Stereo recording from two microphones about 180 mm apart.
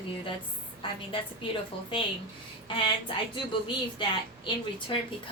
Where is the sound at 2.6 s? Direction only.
25° left (ahead or behind).